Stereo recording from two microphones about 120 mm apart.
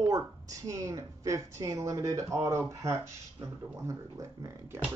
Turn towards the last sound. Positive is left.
turn(degrees=-25)  # may be behind; listen again after turning